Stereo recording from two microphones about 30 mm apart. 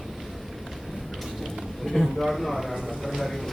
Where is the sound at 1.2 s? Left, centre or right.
Centre.